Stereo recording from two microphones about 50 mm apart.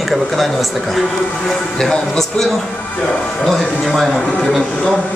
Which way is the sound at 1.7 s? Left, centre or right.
Centre.